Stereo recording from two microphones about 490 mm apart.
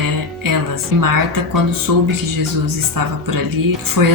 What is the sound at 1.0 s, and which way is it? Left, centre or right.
Speech, right.